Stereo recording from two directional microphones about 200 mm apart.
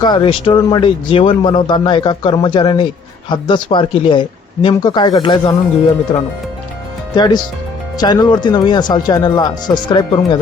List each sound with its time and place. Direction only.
0.0 s speech: 20° left (ahead or behind)